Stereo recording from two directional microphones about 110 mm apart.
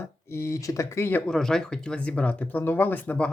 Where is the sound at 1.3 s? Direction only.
5° left (ahead or behind).